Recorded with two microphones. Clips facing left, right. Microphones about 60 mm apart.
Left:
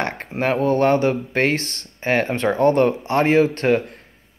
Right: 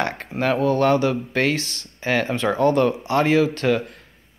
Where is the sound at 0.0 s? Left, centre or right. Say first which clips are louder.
Even; left.